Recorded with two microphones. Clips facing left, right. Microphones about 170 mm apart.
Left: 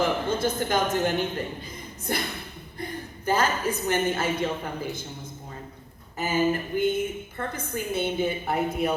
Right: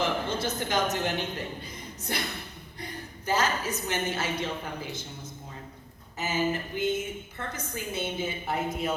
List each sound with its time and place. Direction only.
0.0 s a man's voice: 50° left (ahead or behind)
6.1 s a woman's voice: 50° left (ahead or behind)